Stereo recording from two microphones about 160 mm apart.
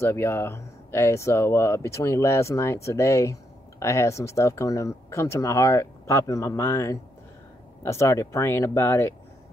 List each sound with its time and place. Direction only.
0.0 s speech: 15° left (ahead or behind)